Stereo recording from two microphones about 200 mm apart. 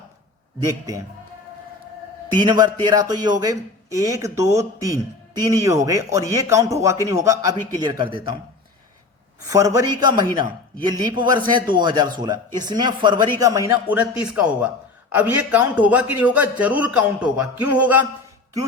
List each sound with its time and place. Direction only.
0.7 s speech: 15° right (ahead or behind)
2.3 s a man's voice: 20° right (ahead or behind)
9.5 s a man's voice: 15° right (ahead or behind)